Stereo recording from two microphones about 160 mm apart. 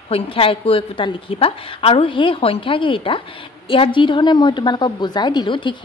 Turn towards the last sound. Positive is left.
turn(degrees=30)  # may be behind; listen again after turning